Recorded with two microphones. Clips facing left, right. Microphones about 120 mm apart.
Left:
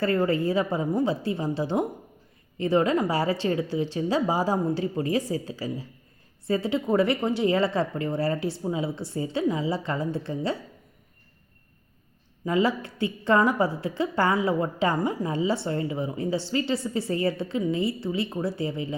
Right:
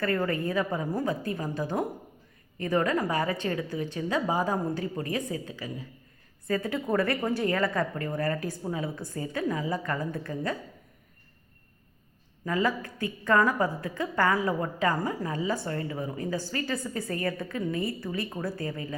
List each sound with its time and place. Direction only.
0.3 s a woman's voice: 30° left (ahead or behind)
12.5 s a woman's voice: 25° left (ahead or behind)